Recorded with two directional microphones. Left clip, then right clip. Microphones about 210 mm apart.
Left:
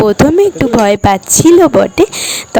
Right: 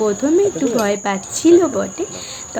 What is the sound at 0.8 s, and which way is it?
Speech, 55° left (ahead or behind).